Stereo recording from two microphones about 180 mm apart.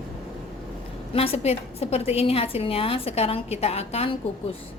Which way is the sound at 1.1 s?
35° left (ahead or behind).